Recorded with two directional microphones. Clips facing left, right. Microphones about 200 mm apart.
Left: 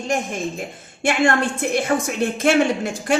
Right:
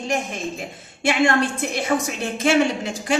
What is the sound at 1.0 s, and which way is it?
A woman's voice, 50° left (ahead or behind).